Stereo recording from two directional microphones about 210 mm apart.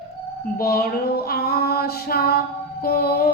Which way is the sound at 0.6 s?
45° left (ahead or behind).